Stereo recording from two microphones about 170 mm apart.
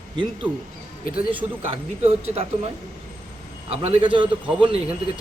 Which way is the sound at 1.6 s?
40° right (ahead or behind).